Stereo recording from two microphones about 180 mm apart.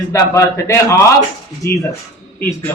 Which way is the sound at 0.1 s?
15° left (ahead or behind).